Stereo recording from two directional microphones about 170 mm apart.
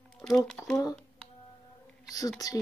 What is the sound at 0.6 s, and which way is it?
Speech, 15° left (ahead or behind).